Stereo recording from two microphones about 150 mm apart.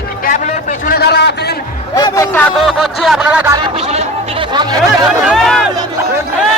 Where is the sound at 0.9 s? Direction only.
90° left.